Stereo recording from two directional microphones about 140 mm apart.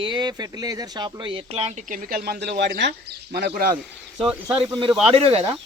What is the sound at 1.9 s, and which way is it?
Speech, 90° right.